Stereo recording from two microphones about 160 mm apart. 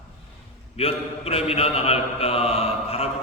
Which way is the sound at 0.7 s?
40° left (ahead or behind).